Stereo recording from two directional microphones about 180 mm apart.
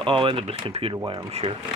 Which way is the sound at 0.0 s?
30° right (ahead or behind).